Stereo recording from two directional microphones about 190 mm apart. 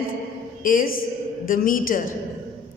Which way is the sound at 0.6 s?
45° left (ahead or behind).